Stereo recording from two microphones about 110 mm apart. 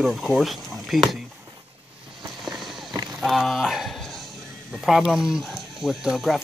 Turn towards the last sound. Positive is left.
turn(degrees=-5)  # may be behind; listen again after turning